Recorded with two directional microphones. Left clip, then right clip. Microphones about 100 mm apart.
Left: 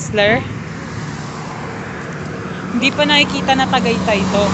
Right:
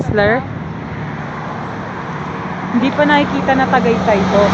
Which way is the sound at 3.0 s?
30° right (ahead or behind).